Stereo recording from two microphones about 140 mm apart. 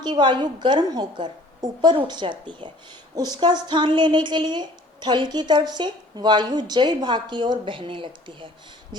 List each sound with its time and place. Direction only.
0.0 s a woman's voice: 30° right (ahead or behind)